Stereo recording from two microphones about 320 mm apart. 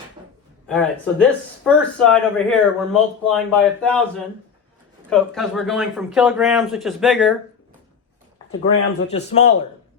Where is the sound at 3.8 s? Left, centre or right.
Centre.